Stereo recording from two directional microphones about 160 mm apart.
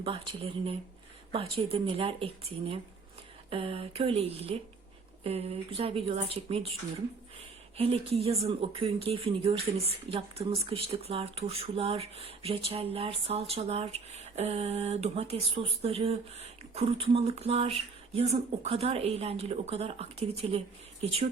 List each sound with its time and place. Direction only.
0.0 s speech: 35° right (ahead or behind)
7.8 s speech: 35° right (ahead or behind)